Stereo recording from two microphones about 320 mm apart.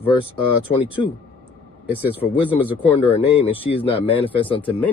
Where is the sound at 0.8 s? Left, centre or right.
Centre.